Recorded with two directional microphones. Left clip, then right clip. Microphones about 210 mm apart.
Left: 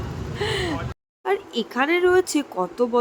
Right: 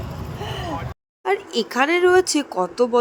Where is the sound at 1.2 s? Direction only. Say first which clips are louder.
Right 3 dB; 20° right (ahead or behind).